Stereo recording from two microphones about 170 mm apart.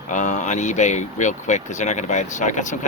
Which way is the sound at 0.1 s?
45° left (ahead or behind).